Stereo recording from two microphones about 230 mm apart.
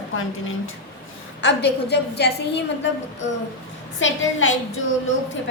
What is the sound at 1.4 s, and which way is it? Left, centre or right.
A woman's voice, left.